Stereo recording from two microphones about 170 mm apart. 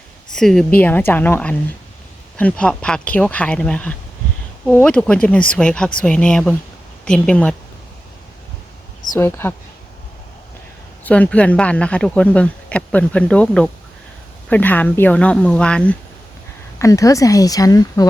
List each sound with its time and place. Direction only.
0.3 s speech: 5° left (ahead or behind)
9.1 s speech: 15° left (ahead or behind)
11.0 s speech: 10° left (ahead or behind)
16.7 s speech: 20° left (ahead or behind)